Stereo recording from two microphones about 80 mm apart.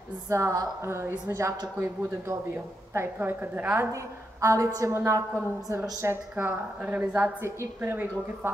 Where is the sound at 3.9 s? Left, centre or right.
Right.